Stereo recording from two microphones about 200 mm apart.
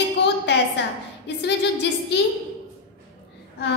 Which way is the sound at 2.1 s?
60° left (ahead or behind).